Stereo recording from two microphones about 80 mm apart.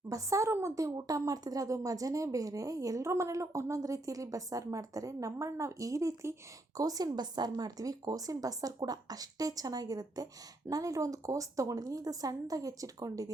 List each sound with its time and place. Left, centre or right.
0.1 s speech: right